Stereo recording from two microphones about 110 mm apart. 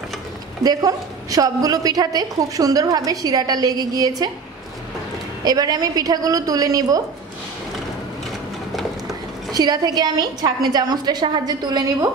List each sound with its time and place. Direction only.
0.7 s a woman's voice: 35° right (ahead or behind)
5.4 s a woman's voice: 35° right (ahead or behind)
9.5 s a woman's voice: 35° right (ahead or behind)